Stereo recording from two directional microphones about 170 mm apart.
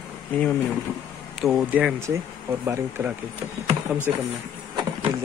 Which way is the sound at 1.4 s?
5° right (ahead or behind).